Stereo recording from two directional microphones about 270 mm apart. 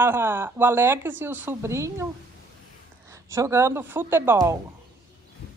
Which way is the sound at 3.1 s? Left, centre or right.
Centre.